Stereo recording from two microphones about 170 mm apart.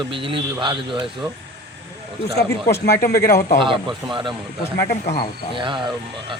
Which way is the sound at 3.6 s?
30° right (ahead or behind).